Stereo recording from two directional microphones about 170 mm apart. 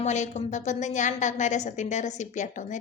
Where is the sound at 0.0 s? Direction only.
45° left (ahead or behind).